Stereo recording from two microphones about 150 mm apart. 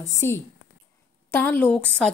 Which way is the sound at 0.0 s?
20° left (ahead or behind).